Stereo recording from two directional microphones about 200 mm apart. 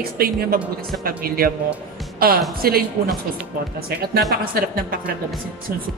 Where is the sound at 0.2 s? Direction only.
50° right (ahead or behind).